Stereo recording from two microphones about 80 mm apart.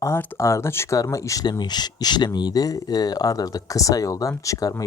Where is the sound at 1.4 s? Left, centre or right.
Left.